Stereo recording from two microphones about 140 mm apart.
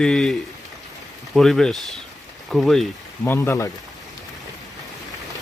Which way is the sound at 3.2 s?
20° left (ahead or behind).